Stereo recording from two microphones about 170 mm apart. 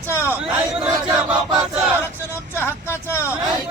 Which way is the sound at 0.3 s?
10° right (ahead or behind).